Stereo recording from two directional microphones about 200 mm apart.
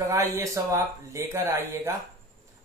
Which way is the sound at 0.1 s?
15° right (ahead or behind).